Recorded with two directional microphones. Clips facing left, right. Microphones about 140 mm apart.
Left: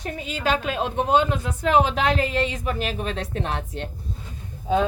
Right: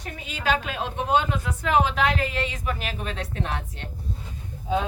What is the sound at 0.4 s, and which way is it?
A woman's voice, 25° left (ahead or behind).